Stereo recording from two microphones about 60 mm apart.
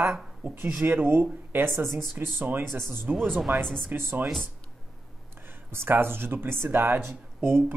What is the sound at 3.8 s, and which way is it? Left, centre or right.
Speech, right.